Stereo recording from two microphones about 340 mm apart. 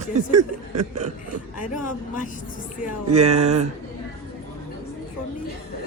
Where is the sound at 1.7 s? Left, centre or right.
Left.